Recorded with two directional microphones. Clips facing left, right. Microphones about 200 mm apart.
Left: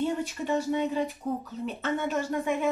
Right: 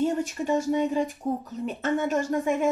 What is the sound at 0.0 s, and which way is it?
Speech, 45° right (ahead or behind).